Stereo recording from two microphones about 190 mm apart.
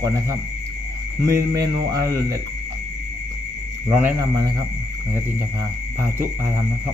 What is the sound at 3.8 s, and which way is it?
Speech, 10° right (ahead or behind).